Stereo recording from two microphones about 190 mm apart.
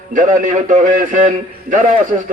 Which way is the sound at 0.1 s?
45° right (ahead or behind).